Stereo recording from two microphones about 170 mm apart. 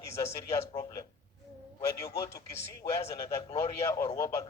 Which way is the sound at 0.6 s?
35° left (ahead or behind).